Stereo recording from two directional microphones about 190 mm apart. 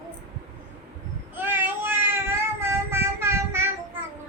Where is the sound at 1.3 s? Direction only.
10° right (ahead or behind).